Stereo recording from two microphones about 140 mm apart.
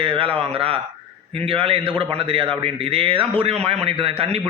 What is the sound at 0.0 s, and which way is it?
A man's voice, 40° right (ahead or behind).